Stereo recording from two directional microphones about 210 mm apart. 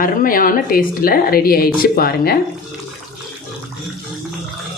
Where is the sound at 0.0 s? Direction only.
40° left (ahead or behind).